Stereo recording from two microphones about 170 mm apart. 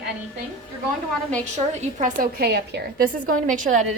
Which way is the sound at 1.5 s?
45° right (ahead or behind).